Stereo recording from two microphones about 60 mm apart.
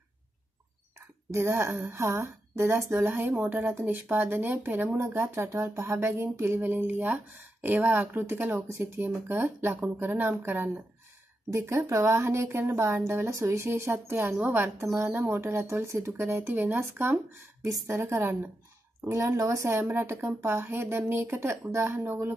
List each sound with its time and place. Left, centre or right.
1.3 s a woman's voice: right
4.9 s a woman's voice: right
8.3 s a woman's voice: right
11.5 s a woman's voice: right
19.9 s a woman's voice: right